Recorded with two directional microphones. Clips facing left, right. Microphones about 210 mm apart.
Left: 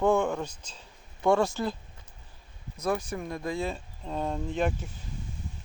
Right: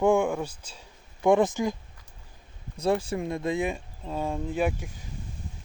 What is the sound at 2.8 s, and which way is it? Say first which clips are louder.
Speech: right 4 dB; 30° right (ahead or behind).